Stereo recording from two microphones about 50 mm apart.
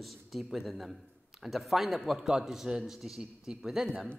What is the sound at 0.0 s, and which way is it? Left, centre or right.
Speech, centre.